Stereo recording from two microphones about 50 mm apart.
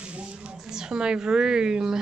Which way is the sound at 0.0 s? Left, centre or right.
Right.